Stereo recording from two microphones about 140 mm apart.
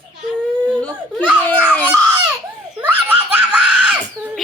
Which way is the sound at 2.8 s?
10° right (ahead or behind).